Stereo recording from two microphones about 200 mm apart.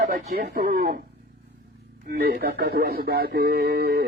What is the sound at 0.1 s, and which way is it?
Speech, 40° right (ahead or behind).